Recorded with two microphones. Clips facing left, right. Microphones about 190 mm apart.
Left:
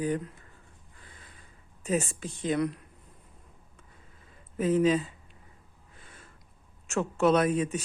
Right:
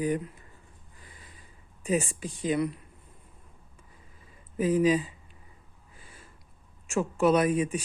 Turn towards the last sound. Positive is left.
turn(degrees=-10)  # may be behind; listen again after turning